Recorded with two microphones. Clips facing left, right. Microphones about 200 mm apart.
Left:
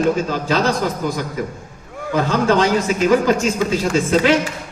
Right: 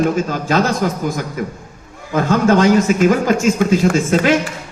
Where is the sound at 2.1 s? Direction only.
50° right (ahead or behind).